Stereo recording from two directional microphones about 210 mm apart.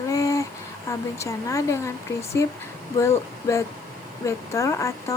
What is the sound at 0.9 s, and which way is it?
Speech, 15° left (ahead or behind).